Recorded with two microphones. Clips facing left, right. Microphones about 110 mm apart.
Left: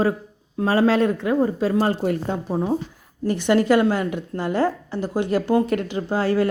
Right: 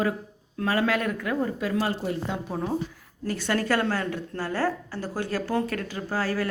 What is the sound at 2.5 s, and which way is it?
A woman's voice, 25° left (ahead or behind).